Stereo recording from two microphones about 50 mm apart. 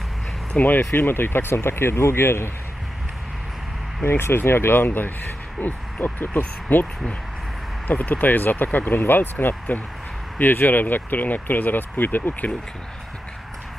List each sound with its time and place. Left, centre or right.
0.5 s speech: left
0.9 s speech: left
4.0 s speech: left